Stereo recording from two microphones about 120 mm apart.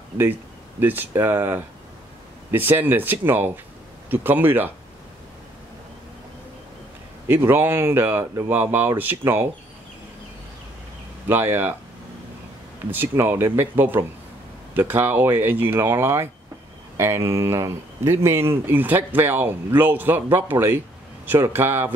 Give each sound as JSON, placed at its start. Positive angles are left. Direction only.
{"t": 0.2, "sound": "speech", "side_deg": -15}
{"t": 7.2, "sound": "speech", "side_deg": -20}
{"t": 11.2, "sound": "speech", "side_deg": -20}
{"t": 12.9, "sound": "speech", "side_deg": -20}